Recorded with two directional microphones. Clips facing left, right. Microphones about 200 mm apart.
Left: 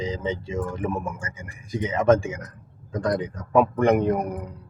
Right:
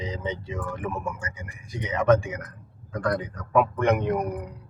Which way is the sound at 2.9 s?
20° left (ahead or behind).